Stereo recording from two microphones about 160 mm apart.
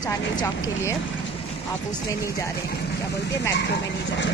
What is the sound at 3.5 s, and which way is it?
Speech, 90° left.